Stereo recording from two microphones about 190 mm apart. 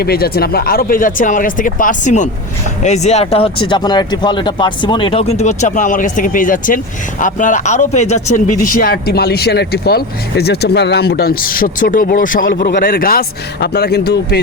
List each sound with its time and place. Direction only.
0.0 s speech: 55° left (ahead or behind)